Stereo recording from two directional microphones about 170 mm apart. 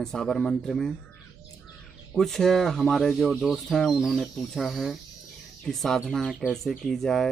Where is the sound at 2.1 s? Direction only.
Centre (ahead or behind).